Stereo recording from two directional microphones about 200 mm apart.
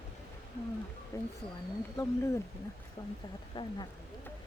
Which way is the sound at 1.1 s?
15° left (ahead or behind).